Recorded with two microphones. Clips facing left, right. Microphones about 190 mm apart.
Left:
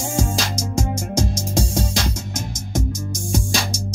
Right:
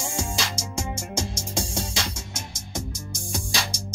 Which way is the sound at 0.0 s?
40° left (ahead or behind).